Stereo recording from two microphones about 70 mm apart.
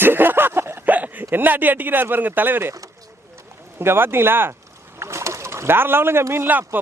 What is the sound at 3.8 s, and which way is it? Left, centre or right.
Speech, right.